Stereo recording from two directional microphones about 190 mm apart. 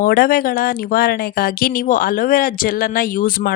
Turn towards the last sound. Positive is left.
turn(degrees=50)  # may be behind; listen again after turning